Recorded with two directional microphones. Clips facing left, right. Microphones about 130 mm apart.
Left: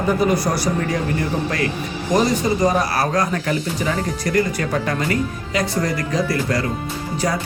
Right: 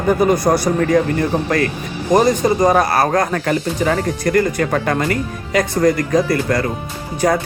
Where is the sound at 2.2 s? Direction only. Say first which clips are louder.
Right 4 dB; 50° right (ahead or behind).